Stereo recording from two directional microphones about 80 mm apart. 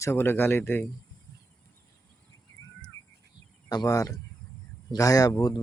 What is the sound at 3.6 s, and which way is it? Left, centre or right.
Speech, left.